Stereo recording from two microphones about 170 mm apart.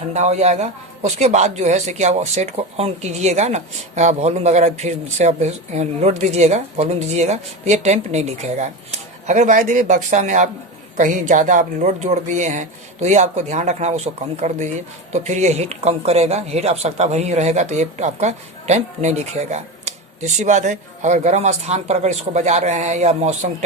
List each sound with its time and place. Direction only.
0.1 s speech: 40° right (ahead or behind)